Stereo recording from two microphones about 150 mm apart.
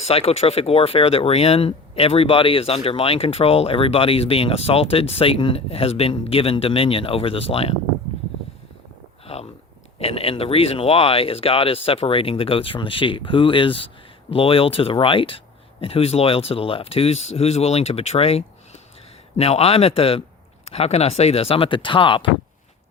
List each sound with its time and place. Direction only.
0.0 s speech: 40° left (ahead or behind)
9.2 s a sound: 40° left (ahead or behind)
10.0 s speech: 40° left (ahead or behind)